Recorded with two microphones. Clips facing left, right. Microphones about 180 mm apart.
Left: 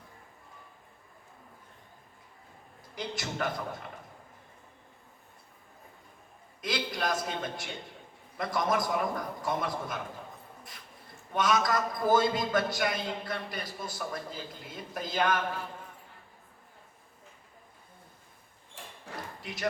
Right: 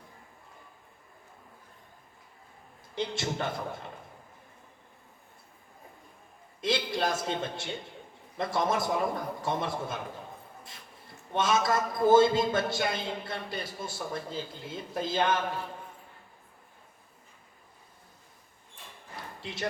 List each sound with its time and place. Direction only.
2.9 s a man's voice: 25° right (ahead or behind)
6.6 s a sound: 25° right (ahead or behind)
8.4 s a man's voice: 25° right (ahead or behind)
11.3 s a man's voice: 25° right (ahead or behind)
19.4 s speech: 25° right (ahead or behind)